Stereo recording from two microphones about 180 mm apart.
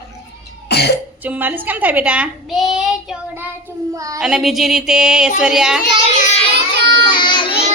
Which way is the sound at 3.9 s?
20° right (ahead or behind).